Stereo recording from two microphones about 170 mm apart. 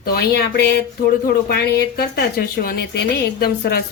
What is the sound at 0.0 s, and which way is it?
A woman's voice, 65° left (ahead or behind).